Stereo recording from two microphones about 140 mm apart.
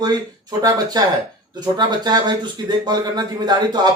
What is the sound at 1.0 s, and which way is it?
A man's voice, 30° right (ahead or behind).